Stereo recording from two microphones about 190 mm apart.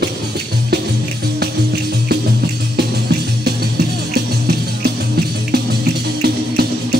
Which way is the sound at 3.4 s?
55° right (ahead or behind).